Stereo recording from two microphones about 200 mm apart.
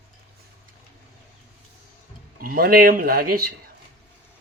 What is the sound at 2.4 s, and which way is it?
Speech, 45° right (ahead or behind).